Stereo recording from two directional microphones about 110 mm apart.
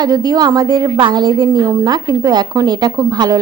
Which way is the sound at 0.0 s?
40° right (ahead or behind).